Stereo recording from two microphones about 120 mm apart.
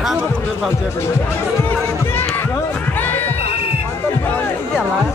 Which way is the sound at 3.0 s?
15° left (ahead or behind).